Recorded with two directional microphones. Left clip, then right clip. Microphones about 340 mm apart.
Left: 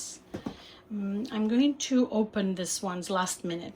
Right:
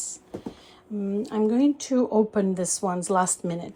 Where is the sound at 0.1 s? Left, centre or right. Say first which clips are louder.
Right 2 dB; centre.